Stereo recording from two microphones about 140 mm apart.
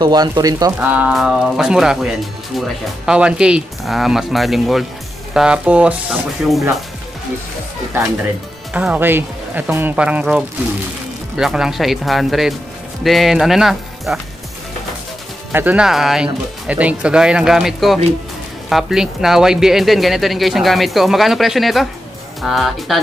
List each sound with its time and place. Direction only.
0.0 s speech: 30° right (ahead or behind)
0.7 s speech: 10° right (ahead or behind)
8.7 s speech: 10° right (ahead or behind)
15.5 s speech: 10° right (ahead or behind)